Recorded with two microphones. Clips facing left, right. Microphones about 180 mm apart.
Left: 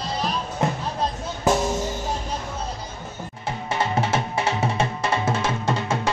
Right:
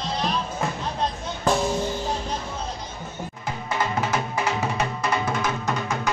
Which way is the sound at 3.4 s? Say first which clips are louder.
Left 2 dB; 25° left (ahead or behind).